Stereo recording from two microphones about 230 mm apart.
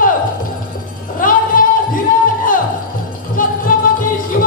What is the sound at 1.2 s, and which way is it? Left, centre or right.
Music, left.